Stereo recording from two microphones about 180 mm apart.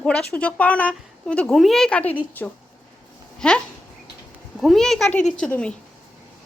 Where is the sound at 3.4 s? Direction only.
5° left (ahead or behind).